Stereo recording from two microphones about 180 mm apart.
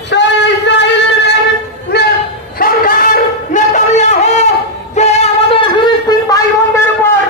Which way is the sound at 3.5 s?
40° left (ahead or behind).